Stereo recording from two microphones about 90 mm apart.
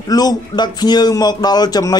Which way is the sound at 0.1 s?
45° left (ahead or behind).